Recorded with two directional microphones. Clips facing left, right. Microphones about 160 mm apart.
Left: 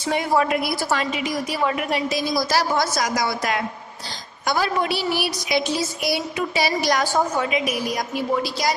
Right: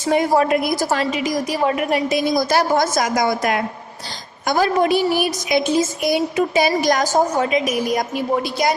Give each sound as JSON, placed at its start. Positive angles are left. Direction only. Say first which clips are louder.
{"t": 0.0, "sound": "a woman's voice", "louder": "right 4 dB", "side_deg": -45}